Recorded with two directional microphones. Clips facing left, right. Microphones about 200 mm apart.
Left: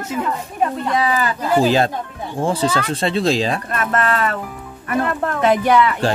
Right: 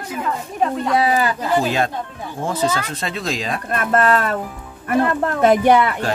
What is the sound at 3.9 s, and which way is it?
Speech, 40° right (ahead or behind).